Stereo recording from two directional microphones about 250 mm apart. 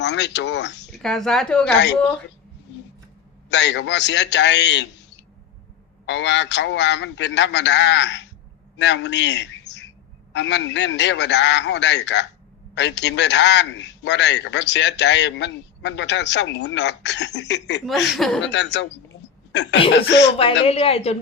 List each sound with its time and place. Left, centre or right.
0.0 s a man's voice: left
0.9 s speech: centre
3.5 s a man's voice: left
17.8 s speech: centre
18.4 s a man's voice: left
19.9 s a man's voice: left
20.7 s a woman's voice: left